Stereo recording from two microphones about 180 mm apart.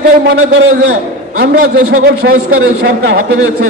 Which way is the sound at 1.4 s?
70° right (ahead or behind).